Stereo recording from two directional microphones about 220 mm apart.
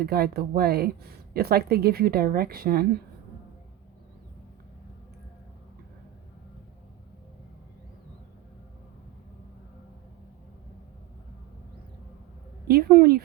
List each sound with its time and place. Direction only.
0.0 s a woman's voice: 45° right (ahead or behind)
12.6 s speech: 45° right (ahead or behind)